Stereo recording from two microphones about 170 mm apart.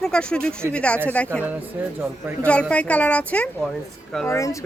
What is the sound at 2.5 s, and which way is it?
A woman's voice, 5° left (ahead or behind).